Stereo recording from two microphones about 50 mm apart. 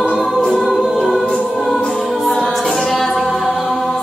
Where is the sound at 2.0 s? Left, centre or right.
Centre.